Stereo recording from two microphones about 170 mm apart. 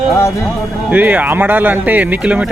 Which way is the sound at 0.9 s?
10° right (ahead or behind).